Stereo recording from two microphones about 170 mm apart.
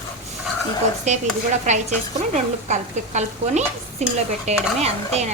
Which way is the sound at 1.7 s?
45° right (ahead or behind).